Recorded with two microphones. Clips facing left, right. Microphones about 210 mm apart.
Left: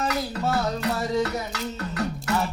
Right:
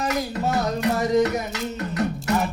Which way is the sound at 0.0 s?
20° right (ahead or behind).